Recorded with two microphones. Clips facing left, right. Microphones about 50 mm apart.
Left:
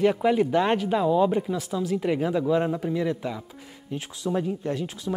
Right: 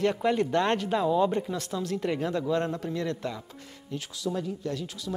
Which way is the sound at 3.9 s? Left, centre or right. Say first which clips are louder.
Left 3 dB; left.